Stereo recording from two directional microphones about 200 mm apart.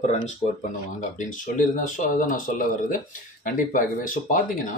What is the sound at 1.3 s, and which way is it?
Speech, 40° left (ahead or behind).